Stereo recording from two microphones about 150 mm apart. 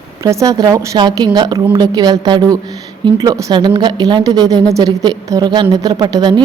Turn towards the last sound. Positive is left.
turn(degrees=-30)  # may be behind; listen again after turning